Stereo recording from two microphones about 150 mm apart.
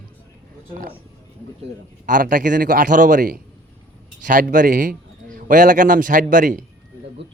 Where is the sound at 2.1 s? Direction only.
60° right (ahead or behind).